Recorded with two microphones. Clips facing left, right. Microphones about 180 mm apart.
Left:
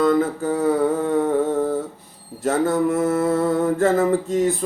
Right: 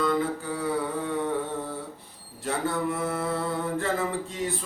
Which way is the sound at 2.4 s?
45° left (ahead or behind).